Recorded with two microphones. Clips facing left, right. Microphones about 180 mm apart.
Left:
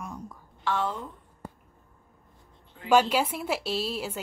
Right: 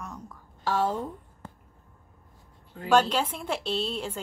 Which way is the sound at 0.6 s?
40° right (ahead or behind).